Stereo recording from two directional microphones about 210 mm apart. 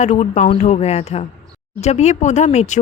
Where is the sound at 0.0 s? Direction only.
35° left (ahead or behind).